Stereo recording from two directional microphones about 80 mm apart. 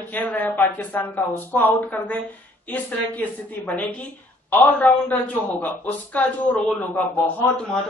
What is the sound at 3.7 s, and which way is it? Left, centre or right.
Speech, centre.